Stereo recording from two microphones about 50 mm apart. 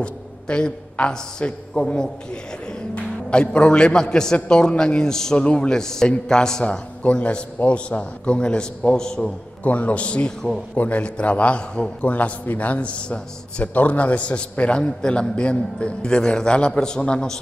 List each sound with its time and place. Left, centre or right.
0.0 s a man's voice: centre
7.0 s a man's voice: left
9.2 s a man's voice: left
12.1 s a man's voice: left